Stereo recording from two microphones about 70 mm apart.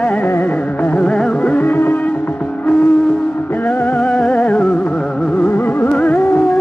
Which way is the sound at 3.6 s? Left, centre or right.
Left.